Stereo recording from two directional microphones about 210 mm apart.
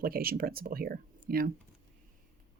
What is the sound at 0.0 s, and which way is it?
Speech, 45° right (ahead or behind).